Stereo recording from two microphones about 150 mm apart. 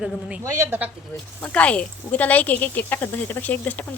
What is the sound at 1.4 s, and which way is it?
Speech, 10° left (ahead or behind).